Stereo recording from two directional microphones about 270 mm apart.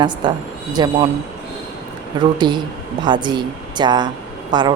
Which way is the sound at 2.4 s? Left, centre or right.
Centre.